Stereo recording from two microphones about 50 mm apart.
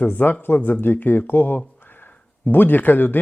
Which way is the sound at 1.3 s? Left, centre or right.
Left.